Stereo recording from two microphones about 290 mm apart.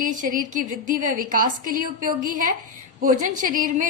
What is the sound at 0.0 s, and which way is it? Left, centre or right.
A woman's voice, right.